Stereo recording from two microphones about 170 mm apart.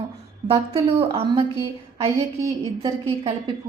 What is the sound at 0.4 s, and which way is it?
A woman's voice, 35° right (ahead or behind).